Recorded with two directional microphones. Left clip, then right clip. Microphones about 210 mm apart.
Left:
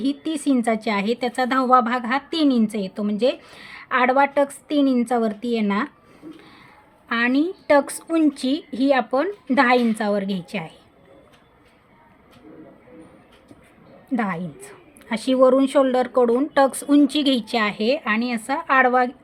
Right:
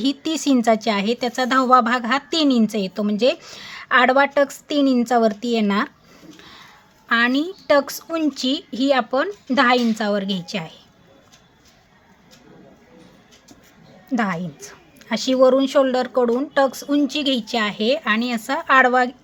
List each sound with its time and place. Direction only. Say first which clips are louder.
0.0 s a woman's voice: right 2 dB; 20° right (ahead or behind)
6.4 s a sound: right 4 dB; 25° right (ahead or behind)
7.1 s a woman's voice: right 2 dB; 5° right (ahead or behind)
14.1 s a woman's voice: right 2 dB; 5° right (ahead or behind)